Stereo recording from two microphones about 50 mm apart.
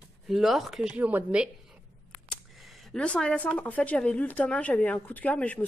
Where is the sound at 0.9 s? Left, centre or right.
Right.